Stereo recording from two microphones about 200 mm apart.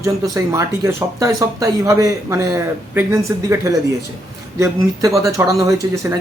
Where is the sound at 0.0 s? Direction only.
15° right (ahead or behind).